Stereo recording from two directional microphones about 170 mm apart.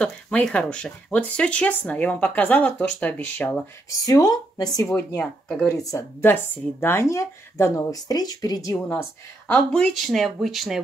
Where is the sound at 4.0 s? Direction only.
20° left (ahead or behind); by 5.7 s 5° left (ahead or behind).